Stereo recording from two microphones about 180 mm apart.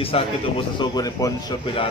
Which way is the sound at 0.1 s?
30° left (ahead or behind).